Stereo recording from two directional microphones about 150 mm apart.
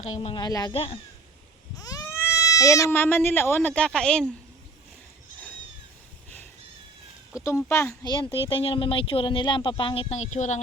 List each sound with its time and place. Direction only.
0.2 s speech: 35° left (ahead or behind); by 4.3 s 5° left (ahead or behind)
7.4 s speech: 20° left (ahead or behind)
8.0 s speech: 35° left (ahead or behind); by 10.6 s 55° left (ahead or behind)